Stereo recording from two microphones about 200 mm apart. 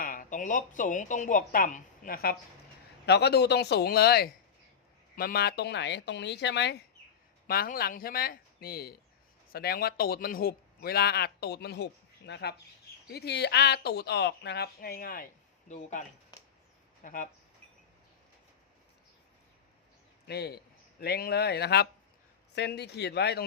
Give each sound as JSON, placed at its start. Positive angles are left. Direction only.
{"t": 0.0, "sound": "speech", "side_deg": 40}
{"t": 7.4, "sound": "a man's voice", "side_deg": 50}
{"t": 20.2, "sound": "a man's voice", "side_deg": 55}